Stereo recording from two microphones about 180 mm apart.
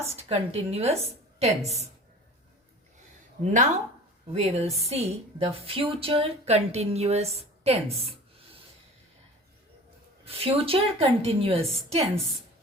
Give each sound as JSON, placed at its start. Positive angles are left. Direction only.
{"t": 0.0, "sound": "a woman's voice", "side_deg": -35}
{"t": 3.4, "sound": "a woman's voice", "side_deg": -45}
{"t": 10.2, "sound": "a woman's voice", "side_deg": -30}